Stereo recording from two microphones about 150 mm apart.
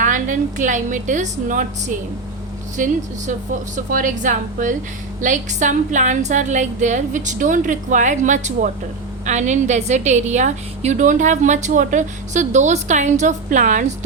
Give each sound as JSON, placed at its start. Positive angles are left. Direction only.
{"t": 0.0, "sound": "a woman's voice", "side_deg": -60}